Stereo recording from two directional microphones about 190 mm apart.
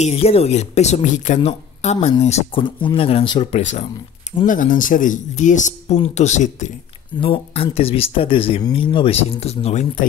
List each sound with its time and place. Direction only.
0.0 s speech: 35° left (ahead or behind)
4.5 s speech: 45° left (ahead or behind)
7.2 s speech: 30° left (ahead or behind)